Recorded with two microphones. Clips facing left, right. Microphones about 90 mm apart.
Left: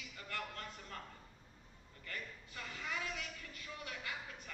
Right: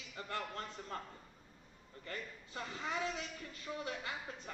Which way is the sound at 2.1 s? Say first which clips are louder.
Right 2 dB; 30° right (ahead or behind).